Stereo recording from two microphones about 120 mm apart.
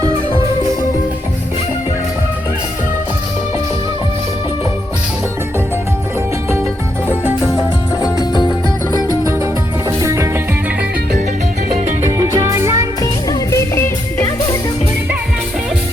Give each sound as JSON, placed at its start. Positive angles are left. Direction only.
{"t": 8.0, "sound": "music", "side_deg": 35}
{"t": 10.0, "sound": "music", "side_deg": -25}
{"t": 12.1, "sound": "music", "side_deg": -30}
{"t": 13.0, "sound": "music", "side_deg": 30}